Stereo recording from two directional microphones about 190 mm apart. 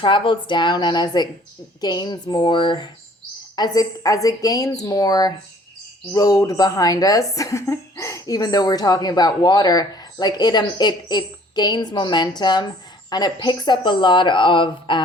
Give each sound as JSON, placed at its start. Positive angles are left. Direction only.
{"t": 0.0, "sound": "speech", "side_deg": 25}